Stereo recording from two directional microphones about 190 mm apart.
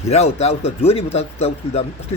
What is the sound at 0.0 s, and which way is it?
Speech, 35° left (ahead or behind).